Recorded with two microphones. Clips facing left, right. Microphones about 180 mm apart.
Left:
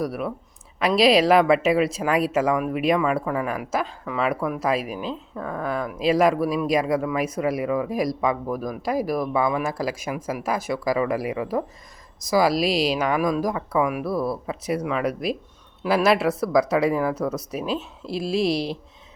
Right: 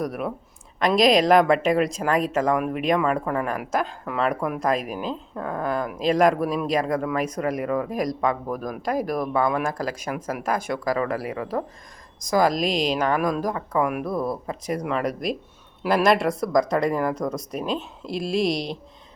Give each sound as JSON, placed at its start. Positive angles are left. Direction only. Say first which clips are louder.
{"t": 0.0, "sound": "a woman's voice", "louder": "left 1 dB", "side_deg": 5}
{"t": 14.1, "sound": "speech", "louder": "left 1 dB", "side_deg": -15}
{"t": 14.8, "sound": "a woman's voice", "louder": "right 1 dB", "side_deg": 0}